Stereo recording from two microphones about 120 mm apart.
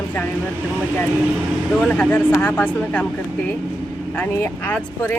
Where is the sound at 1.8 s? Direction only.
10° left (ahead or behind).